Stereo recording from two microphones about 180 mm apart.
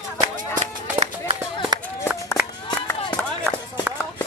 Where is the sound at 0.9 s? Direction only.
30° right (ahead or behind).